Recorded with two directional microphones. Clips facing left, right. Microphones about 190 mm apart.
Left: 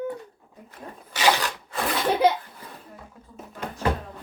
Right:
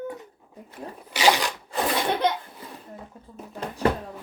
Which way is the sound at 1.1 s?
15° right (ahead or behind).